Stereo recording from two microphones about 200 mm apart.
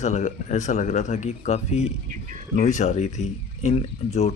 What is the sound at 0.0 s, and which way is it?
Speech, 35° left (ahead or behind).